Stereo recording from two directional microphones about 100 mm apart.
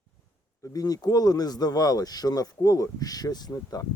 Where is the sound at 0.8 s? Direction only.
40° left (ahead or behind).